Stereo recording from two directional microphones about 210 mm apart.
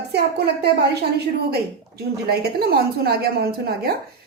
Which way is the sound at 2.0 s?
50° right (ahead or behind).